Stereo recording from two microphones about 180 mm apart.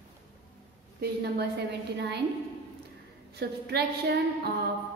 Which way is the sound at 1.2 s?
70° right (ahead or behind).